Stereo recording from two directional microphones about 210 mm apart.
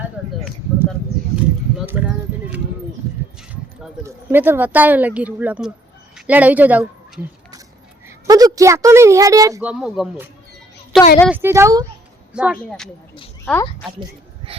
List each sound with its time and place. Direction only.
1.7 s speech: 10° right (ahead or behind)
3.0 s a sound: 15° right (ahead or behind)
4.0 s a woman's voice: 10° right (ahead or behind)
12.3 s speech: 5° right (ahead or behind)
13.4 s speech: 10° left (ahead or behind)
14.5 s dog: 25° right (ahead or behind)